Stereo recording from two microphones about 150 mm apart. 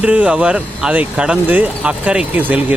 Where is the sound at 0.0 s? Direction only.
10° right (ahead or behind).